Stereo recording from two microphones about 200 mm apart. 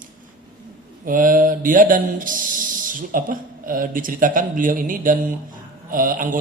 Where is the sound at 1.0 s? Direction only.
45° right (ahead or behind).